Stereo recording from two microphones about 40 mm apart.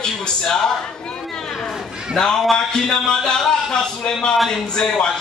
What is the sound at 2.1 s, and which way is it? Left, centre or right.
A man's voice, centre.